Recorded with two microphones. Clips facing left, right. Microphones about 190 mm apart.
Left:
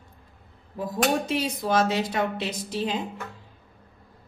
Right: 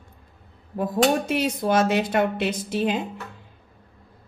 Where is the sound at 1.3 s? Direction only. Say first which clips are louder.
Right 3 dB; 55° right (ahead or behind).